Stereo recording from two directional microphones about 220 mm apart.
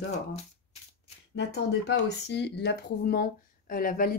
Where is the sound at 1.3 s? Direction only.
50° left (ahead or behind).